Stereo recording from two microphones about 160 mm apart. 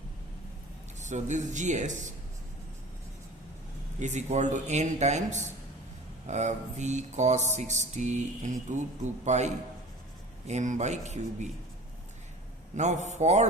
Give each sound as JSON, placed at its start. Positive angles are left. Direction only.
{"t": 0.9, "sound": "music", "side_deg": -50}
{"t": 4.0, "sound": "music", "side_deg": -50}
{"t": 12.7, "sound": "music", "side_deg": -45}